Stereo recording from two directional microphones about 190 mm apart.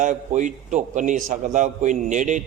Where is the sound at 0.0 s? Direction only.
40° right (ahead or behind).